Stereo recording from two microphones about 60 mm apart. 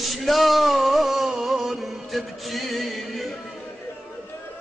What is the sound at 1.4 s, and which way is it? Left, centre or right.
Music, centre.